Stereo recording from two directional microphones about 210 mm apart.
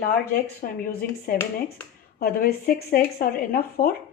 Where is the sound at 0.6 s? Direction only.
45° left (ahead or behind).